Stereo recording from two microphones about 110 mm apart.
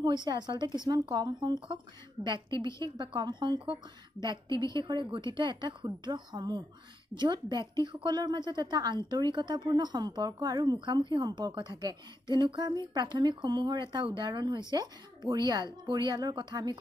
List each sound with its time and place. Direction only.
0.0 s a woman's voice: 45° right (ahead or behind)